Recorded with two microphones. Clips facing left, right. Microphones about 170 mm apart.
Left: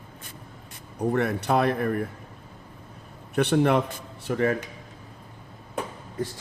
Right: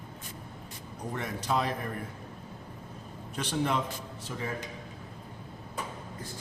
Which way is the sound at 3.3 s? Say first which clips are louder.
Left 9 dB; 65° left (ahead or behind).